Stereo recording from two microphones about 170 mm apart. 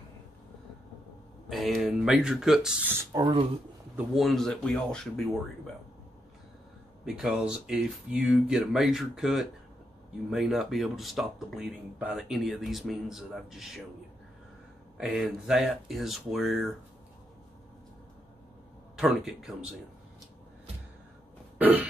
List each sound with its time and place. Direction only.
1.5 s speech: centre (ahead or behind)
3.2 s speech: 30° right (ahead or behind)
3.9 s speech: centre (ahead or behind)
7.2 s speech: 5° right (ahead or behind)
15.0 s speech: centre (ahead or behind)
18.9 s speech: 5° right (ahead or behind)
21.5 s cough: 10° right (ahead or behind)